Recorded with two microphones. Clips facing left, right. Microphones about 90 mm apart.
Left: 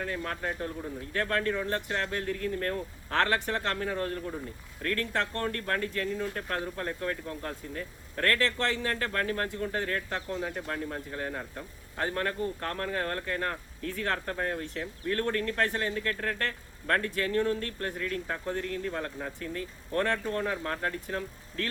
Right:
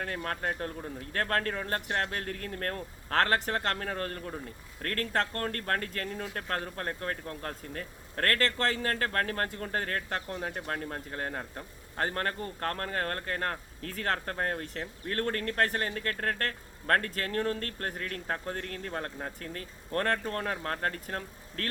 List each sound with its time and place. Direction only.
0.0 s speech: 50° right (ahead or behind)